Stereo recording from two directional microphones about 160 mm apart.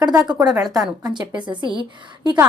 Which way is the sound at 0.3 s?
25° right (ahead or behind).